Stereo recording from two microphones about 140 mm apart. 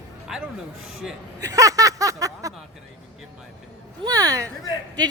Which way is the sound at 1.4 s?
25° right (ahead or behind).